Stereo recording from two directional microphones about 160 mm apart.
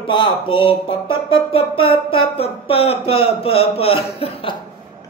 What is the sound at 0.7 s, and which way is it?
Music, 30° left (ahead or behind).